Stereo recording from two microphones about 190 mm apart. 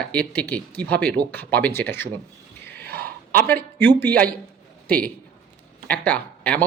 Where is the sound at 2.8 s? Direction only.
55° right (ahead or behind).